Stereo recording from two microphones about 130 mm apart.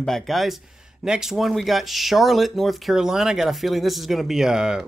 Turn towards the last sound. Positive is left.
turn(degrees=-5)  # may be behind; listen again after turning